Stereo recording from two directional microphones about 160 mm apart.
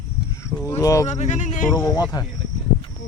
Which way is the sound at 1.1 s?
45° left (ahead or behind).